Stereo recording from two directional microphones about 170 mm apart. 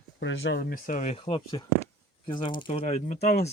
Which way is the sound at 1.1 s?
30° left (ahead or behind).